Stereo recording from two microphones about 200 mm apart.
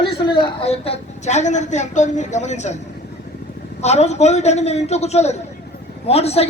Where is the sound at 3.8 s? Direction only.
35° left (ahead or behind).